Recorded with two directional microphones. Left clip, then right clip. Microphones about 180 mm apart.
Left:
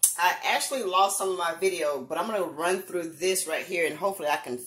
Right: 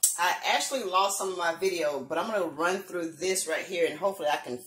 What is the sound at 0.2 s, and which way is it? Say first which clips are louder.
A man's voice: left 2 dB; 30° left (ahead or behind).